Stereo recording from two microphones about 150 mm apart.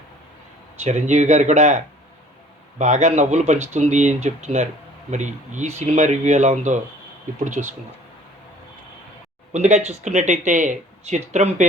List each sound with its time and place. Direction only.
0.9 s speech: 50° right (ahead or behind)
9.5 s speech: 50° right (ahead or behind)